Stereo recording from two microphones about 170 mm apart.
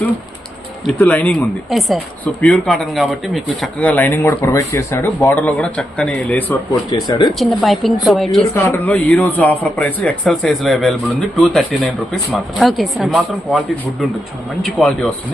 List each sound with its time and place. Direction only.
0.9 s speech: 10° left (ahead or behind)
6.9 s speech: 25° left (ahead or behind)
7.3 s a man's voice: centre (ahead or behind)
8.5 s a man's voice: 10° left (ahead or behind)
14.6 s a man's voice: centre (ahead or behind)